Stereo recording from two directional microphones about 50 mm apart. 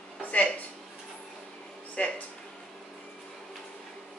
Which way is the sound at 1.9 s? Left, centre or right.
Left.